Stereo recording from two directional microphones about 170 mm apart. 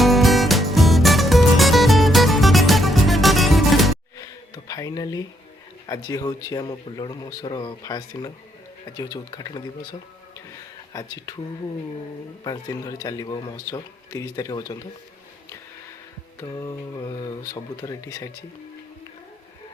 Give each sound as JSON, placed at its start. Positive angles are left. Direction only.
{"t": 0.0, "sound": "music", "side_deg": 0}
{"t": 4.2, "sound": "a sound", "side_deg": 20}
{"t": 5.8, "sound": "speech", "side_deg": 20}
{"t": 10.9, "sound": "speech", "side_deg": 20}
{"t": 12.4, "sound": "speech", "side_deg": 25}
{"t": 16.4, "sound": "speech", "side_deg": 20}